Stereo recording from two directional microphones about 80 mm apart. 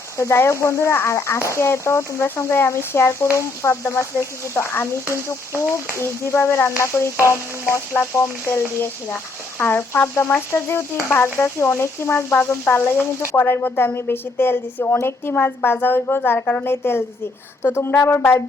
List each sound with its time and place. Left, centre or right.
0.2 s speech: left